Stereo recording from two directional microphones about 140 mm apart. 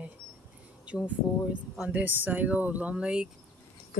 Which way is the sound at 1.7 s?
10° right (ahead or behind).